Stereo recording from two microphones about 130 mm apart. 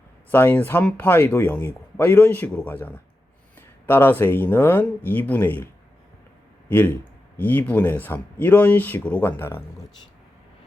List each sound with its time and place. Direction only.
0.3 s speech: 15° left (ahead or behind)
6.7 s speech: 15° left (ahead or behind)